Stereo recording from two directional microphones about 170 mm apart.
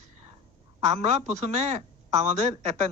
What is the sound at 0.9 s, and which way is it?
Speech, 40° right (ahead or behind).